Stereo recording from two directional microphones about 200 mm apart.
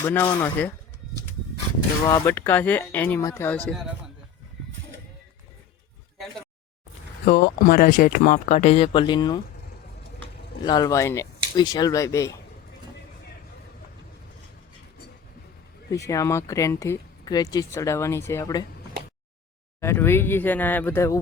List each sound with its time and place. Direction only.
0.0 s speech: 10° left (ahead or behind)
2.0 s speech: 15° left (ahead or behind)
7.3 s speech: 50° left (ahead or behind); by 9.4 s 20° left (ahead or behind)
10.6 s speech: 20° left (ahead or behind)
16.0 s speech: 15° left (ahead or behind)
19.8 s speech: 10° left (ahead or behind)